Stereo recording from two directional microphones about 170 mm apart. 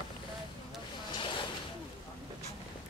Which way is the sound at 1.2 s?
30° left (ahead or behind).